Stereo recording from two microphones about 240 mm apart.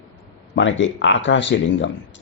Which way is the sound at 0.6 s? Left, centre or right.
Left.